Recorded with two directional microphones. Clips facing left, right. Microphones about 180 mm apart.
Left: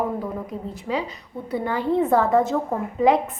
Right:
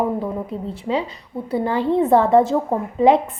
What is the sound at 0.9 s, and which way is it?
A woman's voice, 30° right (ahead or behind).